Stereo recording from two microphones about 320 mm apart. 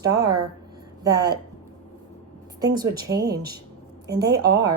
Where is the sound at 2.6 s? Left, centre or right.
Centre.